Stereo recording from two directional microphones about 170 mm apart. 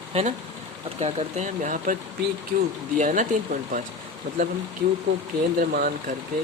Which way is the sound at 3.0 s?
50° right (ahead or behind).